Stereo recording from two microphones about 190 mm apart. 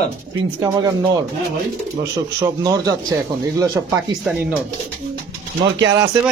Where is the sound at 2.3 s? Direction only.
20° right (ahead or behind).